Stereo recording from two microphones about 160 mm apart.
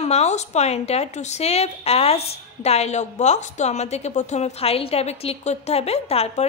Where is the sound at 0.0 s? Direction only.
45° left (ahead or behind).